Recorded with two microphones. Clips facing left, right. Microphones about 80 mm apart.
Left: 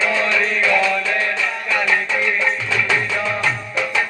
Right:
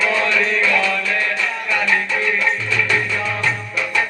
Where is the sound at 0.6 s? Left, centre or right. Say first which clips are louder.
Left 3 dB; left.